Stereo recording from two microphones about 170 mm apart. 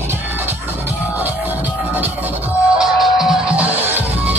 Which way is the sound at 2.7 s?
5° right (ahead or behind).